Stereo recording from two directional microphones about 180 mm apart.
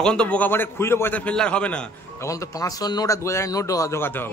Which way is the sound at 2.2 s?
20° left (ahead or behind).